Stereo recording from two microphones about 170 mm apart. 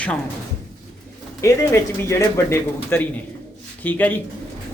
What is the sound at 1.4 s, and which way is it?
A man's voice, 15° left (ahead or behind).